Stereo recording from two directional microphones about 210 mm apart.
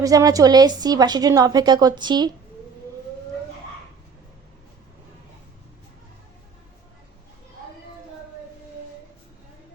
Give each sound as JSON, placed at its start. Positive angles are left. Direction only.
{"t": 0.0, "sound": "a woman's voice", "side_deg": -15}